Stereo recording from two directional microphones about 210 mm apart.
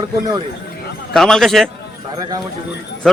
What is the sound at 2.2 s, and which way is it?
Speech, 20° right (ahead or behind).